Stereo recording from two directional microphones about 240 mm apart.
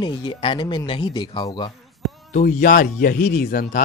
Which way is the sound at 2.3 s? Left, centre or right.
Left.